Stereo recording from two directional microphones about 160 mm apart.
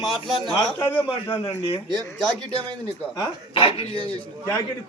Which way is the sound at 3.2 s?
30° left (ahead or behind).